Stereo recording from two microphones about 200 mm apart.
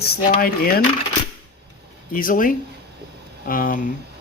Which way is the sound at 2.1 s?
45° left (ahead or behind).